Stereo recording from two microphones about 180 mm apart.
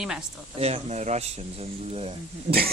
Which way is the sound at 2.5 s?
60° right (ahead or behind).